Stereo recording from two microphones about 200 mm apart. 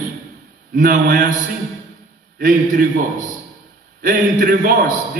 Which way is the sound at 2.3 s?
45° right (ahead or behind).